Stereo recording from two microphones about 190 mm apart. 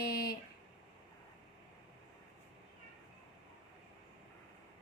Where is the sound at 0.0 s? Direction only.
55° left (ahead or behind).